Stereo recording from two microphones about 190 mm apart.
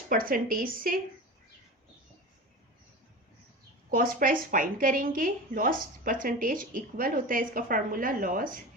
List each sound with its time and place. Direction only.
0.1 s a woman's voice: 50° right (ahead or behind)
3.9 s a woman's voice: 45° right (ahead or behind)